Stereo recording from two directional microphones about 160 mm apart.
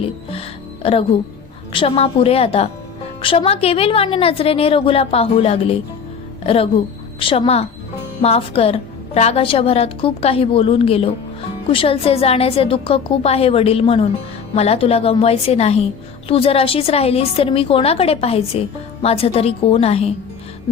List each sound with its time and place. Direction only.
0.3 s music: 35° left (ahead or behind)
1.7 s a woman's voice: 35° left (ahead or behind)